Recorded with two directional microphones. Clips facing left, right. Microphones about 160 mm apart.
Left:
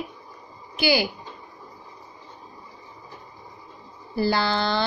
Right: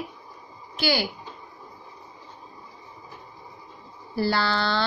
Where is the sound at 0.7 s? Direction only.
15° left (ahead or behind).